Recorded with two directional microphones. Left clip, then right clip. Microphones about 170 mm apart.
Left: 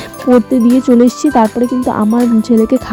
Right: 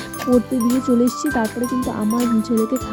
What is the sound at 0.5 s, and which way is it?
Speech, 35° left (ahead or behind).